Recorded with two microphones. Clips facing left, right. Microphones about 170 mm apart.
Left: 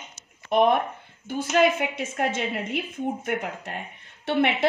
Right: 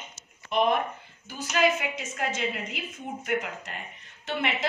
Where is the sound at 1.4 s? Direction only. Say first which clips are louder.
Left 4 dB; 55° left (ahead or behind).